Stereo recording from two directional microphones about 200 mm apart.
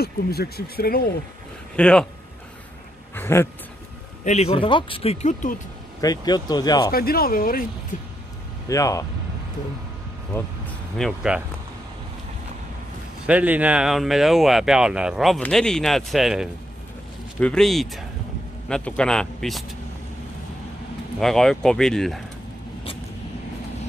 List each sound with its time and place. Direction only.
0.0 s speech: 50° left (ahead or behind)
1.8 s speech: 5° left (ahead or behind)
3.2 s a sound: 10° left (ahead or behind)
4.2 s speech: 35° left (ahead or behind)
5.9 s speech: 20° left (ahead or behind)
6.9 s speech: 50° left (ahead or behind)
8.6 s speech: 15° left (ahead or behind)
11.0 s speech: centre (ahead or behind)
13.3 s speech: 10° right (ahead or behind)
21.2 s speech: centre (ahead or behind)